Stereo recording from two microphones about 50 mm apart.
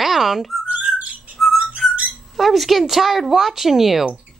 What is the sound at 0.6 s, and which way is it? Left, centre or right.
Whistling, right.